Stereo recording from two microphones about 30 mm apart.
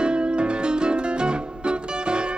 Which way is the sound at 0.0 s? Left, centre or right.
Right.